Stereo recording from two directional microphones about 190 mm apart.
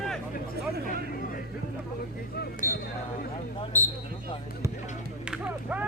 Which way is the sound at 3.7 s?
10° left (ahead or behind).